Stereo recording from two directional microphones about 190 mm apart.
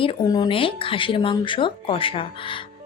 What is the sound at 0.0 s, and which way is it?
A woman's voice, 25° left (ahead or behind).